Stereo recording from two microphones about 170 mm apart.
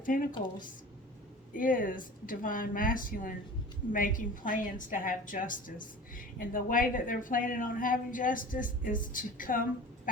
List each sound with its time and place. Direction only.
0.0 s a woman's voice: 55° left (ahead or behind)
1.5 s a woman's voice: 55° left (ahead or behind)